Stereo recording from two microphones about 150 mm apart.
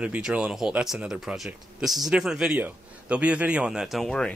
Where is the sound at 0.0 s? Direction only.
10° right (ahead or behind).